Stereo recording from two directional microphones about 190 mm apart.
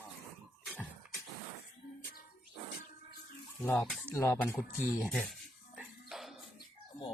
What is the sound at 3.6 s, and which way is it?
Speech, 5° left (ahead or behind).